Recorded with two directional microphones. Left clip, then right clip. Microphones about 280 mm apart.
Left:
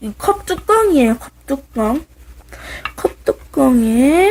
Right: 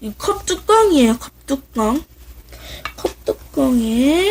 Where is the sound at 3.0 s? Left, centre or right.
Left.